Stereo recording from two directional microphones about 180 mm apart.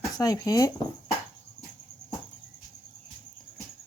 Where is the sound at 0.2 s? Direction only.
20° left (ahead or behind).